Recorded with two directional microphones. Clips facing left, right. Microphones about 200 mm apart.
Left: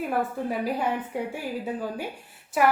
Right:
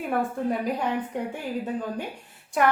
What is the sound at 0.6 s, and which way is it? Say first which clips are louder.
Speech: even; 5° left (ahead or behind).